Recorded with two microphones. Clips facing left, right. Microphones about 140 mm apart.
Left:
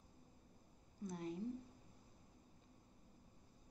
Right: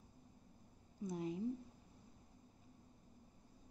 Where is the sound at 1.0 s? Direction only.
15° right (ahead or behind).